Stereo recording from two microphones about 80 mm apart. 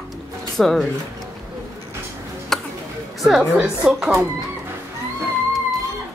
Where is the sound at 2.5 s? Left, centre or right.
Centre.